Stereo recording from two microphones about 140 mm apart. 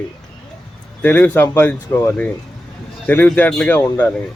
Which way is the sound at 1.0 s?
15° left (ahead or behind).